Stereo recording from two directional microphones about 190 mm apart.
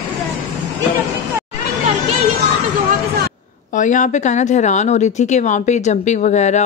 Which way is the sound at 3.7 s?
40° left (ahead or behind).